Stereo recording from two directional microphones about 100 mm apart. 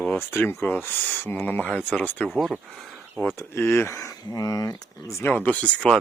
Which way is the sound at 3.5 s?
25° left (ahead or behind).